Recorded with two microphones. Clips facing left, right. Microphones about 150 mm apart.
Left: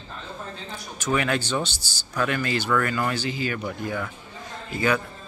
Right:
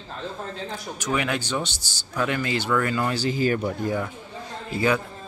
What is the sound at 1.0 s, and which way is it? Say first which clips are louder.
A man's voice: left 2 dB; 15° right (ahead or behind).